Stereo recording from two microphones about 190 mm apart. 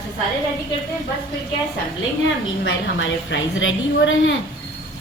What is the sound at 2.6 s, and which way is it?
A woman's voice, 70° left (ahead or behind).